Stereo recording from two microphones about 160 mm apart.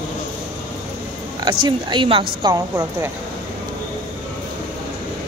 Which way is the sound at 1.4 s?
30° right (ahead or behind).